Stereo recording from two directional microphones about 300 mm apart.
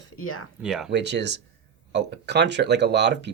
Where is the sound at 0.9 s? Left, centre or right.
Right.